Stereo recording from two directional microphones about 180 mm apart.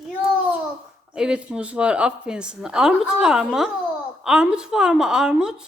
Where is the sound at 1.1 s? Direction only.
5° right (ahead or behind).